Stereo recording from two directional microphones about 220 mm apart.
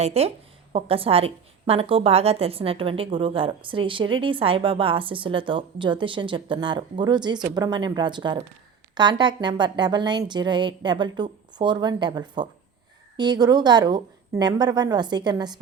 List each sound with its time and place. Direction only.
0.0 s a woman's voice: 30° right (ahead or behind)